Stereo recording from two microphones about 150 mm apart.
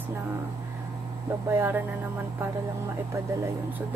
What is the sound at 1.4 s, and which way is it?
Speech, 15° right (ahead or behind).